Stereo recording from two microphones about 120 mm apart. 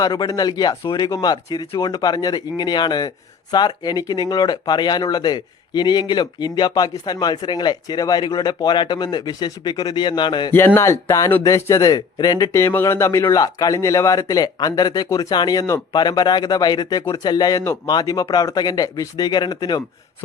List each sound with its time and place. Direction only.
0.0 s speech: 35° left (ahead or behind)
10.8 s speech: 25° left (ahead or behind)
17.6 s speech: 25° left (ahead or behind)